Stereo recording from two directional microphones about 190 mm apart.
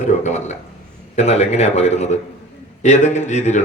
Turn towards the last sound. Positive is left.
turn(degrees=40)  # may be behind; listen again after turning